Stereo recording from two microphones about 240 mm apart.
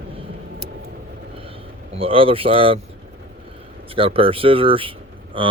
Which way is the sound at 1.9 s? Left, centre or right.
Right.